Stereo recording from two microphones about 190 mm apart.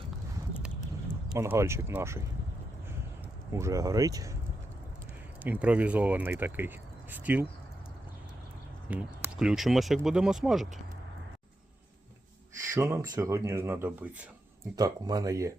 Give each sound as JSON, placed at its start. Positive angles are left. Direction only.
{"t": 1.3, "sound": "speech", "side_deg": -10}
{"t": 3.5, "sound": "speech", "side_deg": -15}
{"t": 5.4, "sound": "speech", "side_deg": -10}
{"t": 8.9, "sound": "speech", "side_deg": -5}
{"t": 12.7, "sound": "speech", "side_deg": -15}